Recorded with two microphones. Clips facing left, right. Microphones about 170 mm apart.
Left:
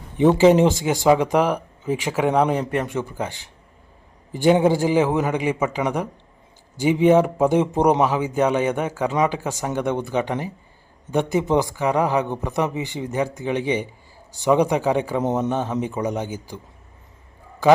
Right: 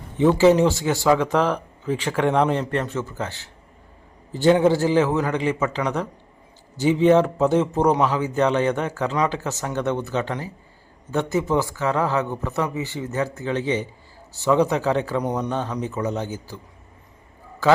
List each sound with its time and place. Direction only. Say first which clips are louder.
0.2 s speech: left 1 dB; 20° left (ahead or behind)